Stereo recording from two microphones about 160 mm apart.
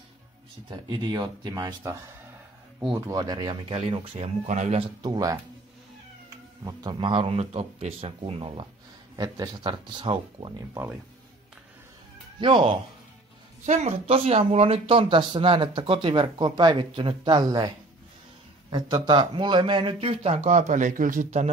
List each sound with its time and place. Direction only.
0.7 s speech: 30° right (ahead or behind)
2.9 s speech: 25° right (ahead or behind)
12.4 s speech: 30° right (ahead or behind)
13.7 s speech: 45° right (ahead or behind); by 17.6 s 25° right (ahead or behind)
18.7 s speech: 30° right (ahead or behind); by 21.5 s 50° right (ahead or behind)